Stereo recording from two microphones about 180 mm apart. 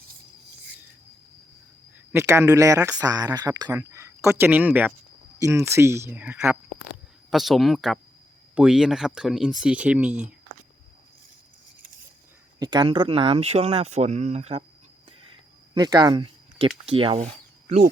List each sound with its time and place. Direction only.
2.1 s speech: 15° right (ahead or behind)
12.5 s speech: 20° right (ahead or behind)
15.7 s speech: 20° right (ahead or behind); by 17.8 s 40° right (ahead or behind)